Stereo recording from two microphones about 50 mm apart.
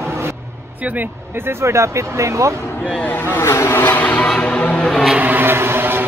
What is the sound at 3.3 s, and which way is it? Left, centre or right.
Speech, left.